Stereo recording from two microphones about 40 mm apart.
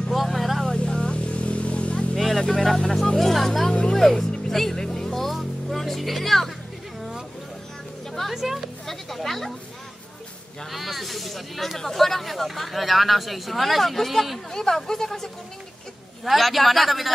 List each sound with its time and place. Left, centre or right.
0.1 s vehicle: centre
0.7 s a sound: centre
1.3 s vehicle: left
2.1 s vehicle: centre
2.4 s speech: centre
3.9 s music: centre
8.1 s music: centre
8.4 s speech: centre
8.8 s speech: centre
10.7 s speech: centre
16.3 s speech: centre